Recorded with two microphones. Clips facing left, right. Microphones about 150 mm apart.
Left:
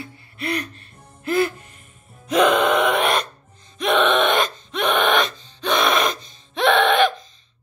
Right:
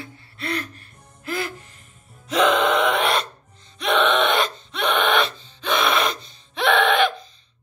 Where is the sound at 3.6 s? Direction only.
15° left (ahead or behind).